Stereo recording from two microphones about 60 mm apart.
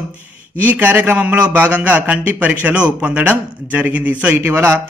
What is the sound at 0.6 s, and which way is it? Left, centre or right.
Speech, right.